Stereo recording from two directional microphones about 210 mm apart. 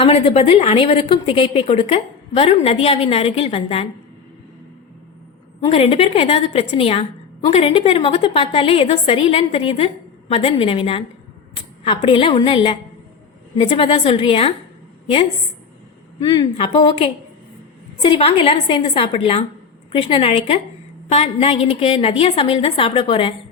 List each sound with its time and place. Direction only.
0.0 s a woman's voice: 30° left (ahead or behind)
5.5 s a woman's voice: 30° left (ahead or behind)
16.2 s a woman's voice: 20° left (ahead or behind)